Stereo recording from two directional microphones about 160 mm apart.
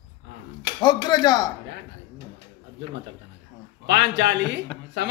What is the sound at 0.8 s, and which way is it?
Speech, 25° left (ahead or behind).